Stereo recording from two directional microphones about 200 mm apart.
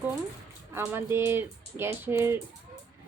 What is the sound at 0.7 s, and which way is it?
A woman's voice, 10° right (ahead or behind).